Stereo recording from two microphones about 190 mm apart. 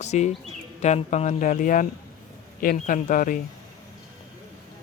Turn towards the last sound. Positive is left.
turn(degrees=45)  # may be behind; listen again after turning